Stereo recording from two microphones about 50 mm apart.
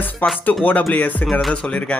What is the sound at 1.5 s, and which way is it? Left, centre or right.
Speech, left.